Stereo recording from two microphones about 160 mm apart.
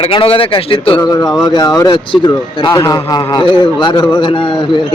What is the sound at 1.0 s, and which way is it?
A man's voice, 25° left (ahead or behind).